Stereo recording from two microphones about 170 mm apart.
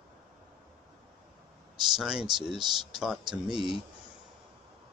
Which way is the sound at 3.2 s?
25° right (ahead or behind).